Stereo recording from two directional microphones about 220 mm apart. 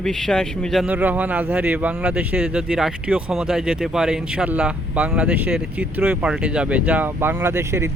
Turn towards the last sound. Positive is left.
turn(degrees=-10)  # may be behind; listen again after turning